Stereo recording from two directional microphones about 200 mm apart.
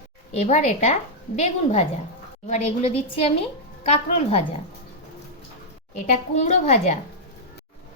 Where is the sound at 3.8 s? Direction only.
30° left (ahead or behind).